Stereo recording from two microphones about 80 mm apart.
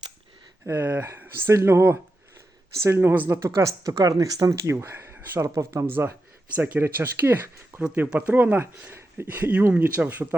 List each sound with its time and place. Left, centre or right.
0.6 s speech: right
3.4 s speech: right
5.4 s speech: right
6.6 s speech: right
7.9 s speech: centre
8.9 s a sound: right
9.2 s speech: right